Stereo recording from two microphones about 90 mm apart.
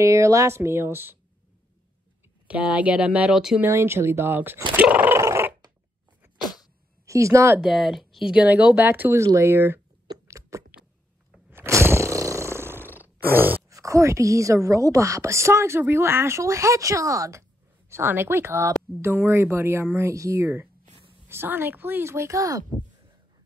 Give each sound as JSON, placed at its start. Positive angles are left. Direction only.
{"t": 0.0, "sound": "speech", "side_deg": -35}
{"t": 2.4, "sound": "speech", "side_deg": -15}
{"t": 3.6, "sound": "speech", "side_deg": -30}
{"t": 4.7, "sound": "dog", "side_deg": -15}
{"t": 5.1, "sound": "dog", "side_deg": -30}
{"t": 6.4, "sound": "cat", "side_deg": 50}
{"t": 7.1, "sound": "a woman's voice", "side_deg": -35}
{"t": 7.6, "sound": "speech", "side_deg": -5}
{"t": 10.2, "sound": "a sound", "side_deg": -35}
{"t": 11.5, "sound": "roar", "side_deg": -30}
{"t": 13.7, "sound": "a woman's voice", "side_deg": -35}